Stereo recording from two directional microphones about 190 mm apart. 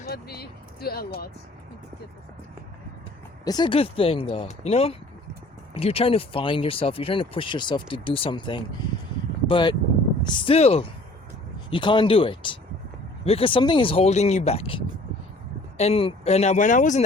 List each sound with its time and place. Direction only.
0.0 s speech: 55° left (ahead or behind)
3.4 s speech: 20° left (ahead or behind); by 17.0 s 40° left (ahead or behind)